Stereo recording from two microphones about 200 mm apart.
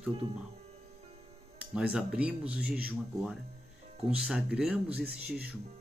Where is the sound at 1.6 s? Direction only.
5° right (ahead or behind).